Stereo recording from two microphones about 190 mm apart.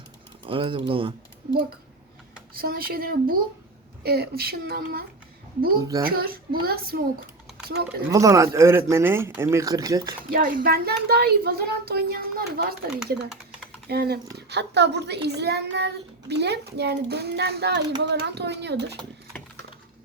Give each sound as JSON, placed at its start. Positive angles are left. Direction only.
{"t": 0.4, "sound": "speech", "side_deg": -25}
{"t": 2.6, "sound": "a child's voice", "side_deg": -50}
{"t": 5.8, "sound": "speech", "side_deg": -20}
{"t": 6.1, "sound": "a child's voice", "side_deg": -50}
{"t": 8.1, "sound": "speech", "side_deg": -15}
{"t": 10.2, "sound": "a child's voice", "side_deg": -50}
{"t": 13.8, "sound": "speech", "side_deg": -55}